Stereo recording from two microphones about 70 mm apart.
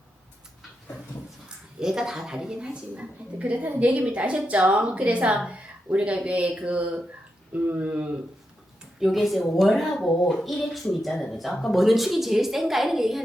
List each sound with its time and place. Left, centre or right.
1.5 s speech: centre
2.9 s a woman's voice: centre
9.0 s a woman's voice: centre